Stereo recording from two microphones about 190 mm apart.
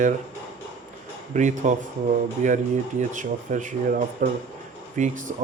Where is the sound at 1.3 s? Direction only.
40° right (ahead or behind).